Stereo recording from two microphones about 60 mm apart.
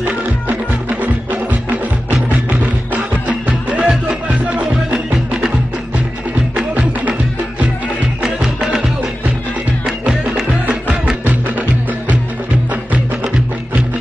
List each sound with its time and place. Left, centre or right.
0.0 s music: right
6.5 s music: right
8.2 s music: centre
10.7 s music: centre
11.2 s music: right